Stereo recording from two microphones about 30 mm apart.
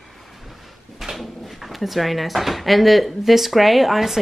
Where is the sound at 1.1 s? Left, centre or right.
Centre.